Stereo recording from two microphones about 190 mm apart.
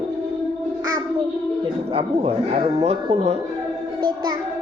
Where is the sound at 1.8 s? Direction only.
30° right (ahead or behind).